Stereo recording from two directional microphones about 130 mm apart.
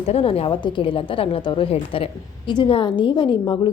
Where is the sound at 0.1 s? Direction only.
50° left (ahead or behind).